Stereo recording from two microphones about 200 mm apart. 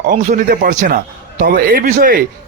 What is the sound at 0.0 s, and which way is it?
A man's voice, 40° right (ahead or behind).